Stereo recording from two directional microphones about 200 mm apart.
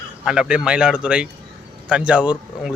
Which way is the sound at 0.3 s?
5° right (ahead or behind).